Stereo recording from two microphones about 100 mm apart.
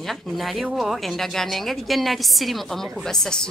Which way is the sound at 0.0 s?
Centre (ahead or behind).